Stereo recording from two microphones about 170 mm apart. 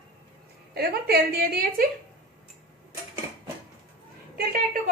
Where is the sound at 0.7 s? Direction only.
70° right (ahead or behind).